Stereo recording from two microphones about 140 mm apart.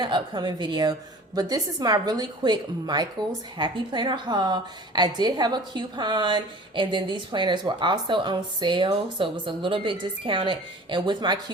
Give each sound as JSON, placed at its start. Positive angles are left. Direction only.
{"t": 0.0, "sound": "a woman's voice", "side_deg": -35}